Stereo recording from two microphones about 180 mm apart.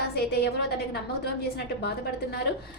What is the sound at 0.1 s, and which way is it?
A woman's voice, 65° left (ahead or behind).